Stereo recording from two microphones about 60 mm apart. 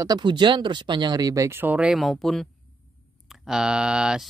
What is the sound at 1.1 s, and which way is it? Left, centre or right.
Speech, right.